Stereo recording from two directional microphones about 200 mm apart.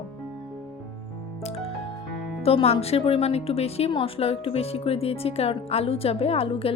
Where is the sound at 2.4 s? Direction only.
30° left (ahead or behind).